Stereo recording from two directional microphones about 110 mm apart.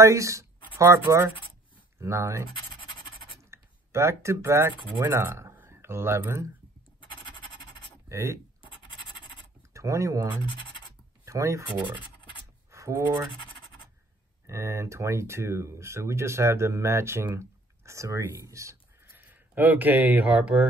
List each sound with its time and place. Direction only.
0.0 s speech: 30° right (ahead or behind)
2.8 s a sound: 50° left (ahead or behind)
3.4 s speech: 25° right (ahead or behind)
8.1 s speech: 25° right (ahead or behind)
9.8 s speech: 30° right (ahead or behind)
11.2 s speech: 30° right (ahead or behind)
12.7 s speech: 30° right (ahead or behind)
14.4 s speech: 25° right (ahead or behind)